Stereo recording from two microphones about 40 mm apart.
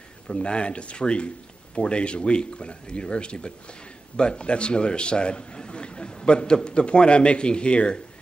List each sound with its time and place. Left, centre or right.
0.3 s a man's voice: left